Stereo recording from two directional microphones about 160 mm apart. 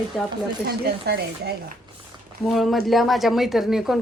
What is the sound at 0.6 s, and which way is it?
Speech, 85° right.